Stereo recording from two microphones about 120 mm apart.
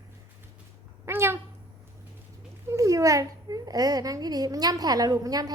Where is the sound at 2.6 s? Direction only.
25° right (ahead or behind).